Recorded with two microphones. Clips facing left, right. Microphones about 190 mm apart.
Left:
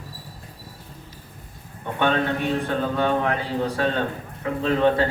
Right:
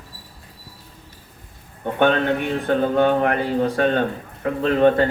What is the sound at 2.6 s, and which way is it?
A man's voice, 60° right (ahead or behind).